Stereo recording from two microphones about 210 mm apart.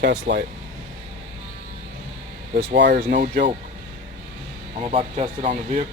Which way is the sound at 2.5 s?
50° right (ahead or behind).